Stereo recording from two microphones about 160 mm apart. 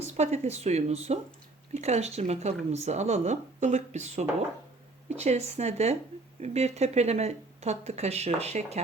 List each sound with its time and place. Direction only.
0.0 s speech: 45° right (ahead or behind)